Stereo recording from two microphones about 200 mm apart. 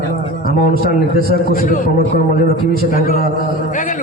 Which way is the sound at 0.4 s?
45° left (ahead or behind).